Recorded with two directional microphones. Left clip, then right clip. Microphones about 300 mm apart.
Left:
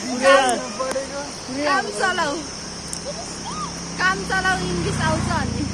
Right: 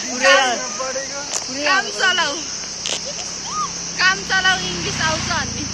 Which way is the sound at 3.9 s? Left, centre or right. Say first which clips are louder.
Right 4 dB; centre.